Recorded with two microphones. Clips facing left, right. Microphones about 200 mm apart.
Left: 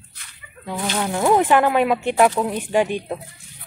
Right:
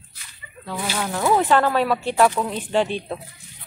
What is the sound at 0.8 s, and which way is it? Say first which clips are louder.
Speech: left 3 dB; 10° right (ahead or behind).